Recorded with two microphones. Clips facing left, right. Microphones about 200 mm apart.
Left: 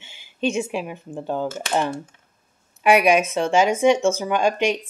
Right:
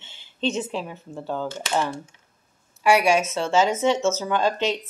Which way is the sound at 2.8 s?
15° left (ahead or behind).